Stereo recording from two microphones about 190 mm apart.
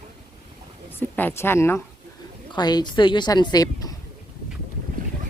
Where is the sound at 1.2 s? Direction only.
10° left (ahead or behind).